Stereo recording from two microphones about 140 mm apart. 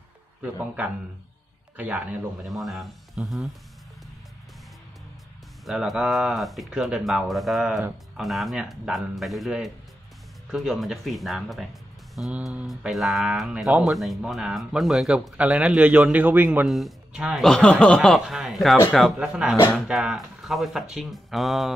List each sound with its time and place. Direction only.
1.8 s speech: 10° right (ahead or behind)
2.4 s speech: centre (ahead or behind)
5.7 s speech: 5° right (ahead or behind)
16.6 s speech: centre (ahead or behind)
17.4 s speech: 5° left (ahead or behind)